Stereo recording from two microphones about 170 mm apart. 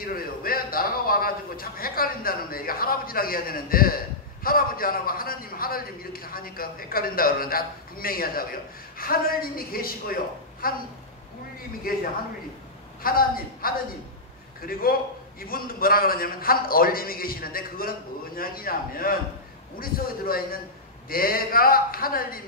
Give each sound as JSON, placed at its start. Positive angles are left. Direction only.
{"t": 0.0, "sound": "a man's voice", "side_deg": 60}
{"t": 13.0, "sound": "a man's voice", "side_deg": 60}